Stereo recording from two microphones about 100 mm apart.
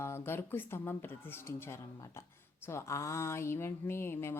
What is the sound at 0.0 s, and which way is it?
A woman's voice, 25° left (ahead or behind).